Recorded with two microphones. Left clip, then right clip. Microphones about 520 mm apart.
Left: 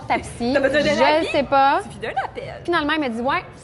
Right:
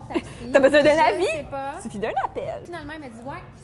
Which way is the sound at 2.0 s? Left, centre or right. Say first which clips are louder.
Even; right.